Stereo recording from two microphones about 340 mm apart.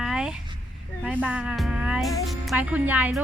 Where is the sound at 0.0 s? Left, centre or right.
Centre.